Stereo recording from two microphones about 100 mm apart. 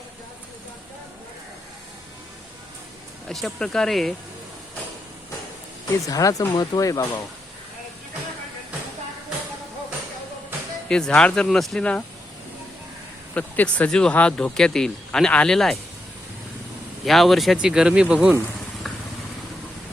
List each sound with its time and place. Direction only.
3.2 s speech: 5° left (ahead or behind)
6.1 s speech: 35° left (ahead or behind)
10.8 s speech: 5° left (ahead or behind)
13.3 s speech: 15° left (ahead or behind)
17.1 s speech: centre (ahead or behind)